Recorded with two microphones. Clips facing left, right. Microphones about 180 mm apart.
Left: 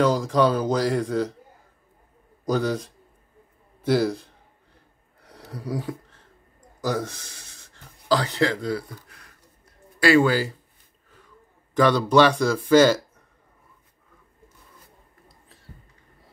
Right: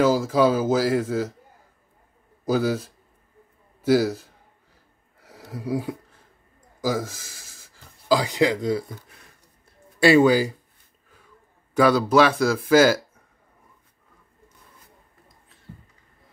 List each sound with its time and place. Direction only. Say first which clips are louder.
0.0 s speech: right 1 dB; 5° right (ahead or behind)
2.4 s a man's voice: right 2 dB; 5° right (ahead or behind)
5.2 s a sound: right 3 dB; 5° right (ahead or behind)
9.9 s speech: right 3 dB; 20° right (ahead or behind)
11.7 s speech: right 1 dB; 5° right (ahead or behind)